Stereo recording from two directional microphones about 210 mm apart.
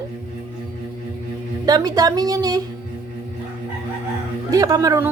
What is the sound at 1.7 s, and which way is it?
Speech, 20° right (ahead or behind).